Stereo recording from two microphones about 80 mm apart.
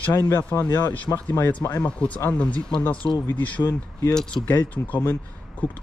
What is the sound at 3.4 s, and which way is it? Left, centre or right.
Speech, left.